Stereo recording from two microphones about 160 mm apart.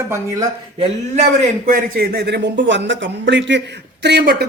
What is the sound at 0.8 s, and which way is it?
A man's voice, 45° right (ahead or behind).